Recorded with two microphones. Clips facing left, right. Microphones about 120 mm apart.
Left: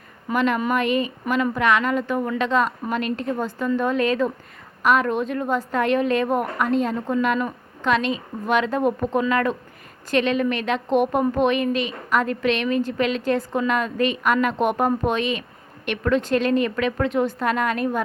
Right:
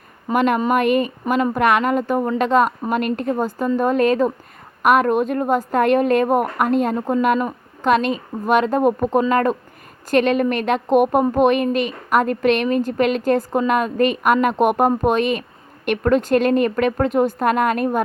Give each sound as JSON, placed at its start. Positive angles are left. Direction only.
{"t": 0.3, "sound": "speech", "side_deg": -50}